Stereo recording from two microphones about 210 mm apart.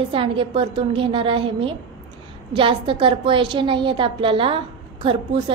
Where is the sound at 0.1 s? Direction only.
25° right (ahead or behind).